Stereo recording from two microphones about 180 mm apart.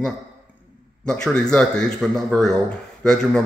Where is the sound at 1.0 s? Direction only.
5° left (ahead or behind).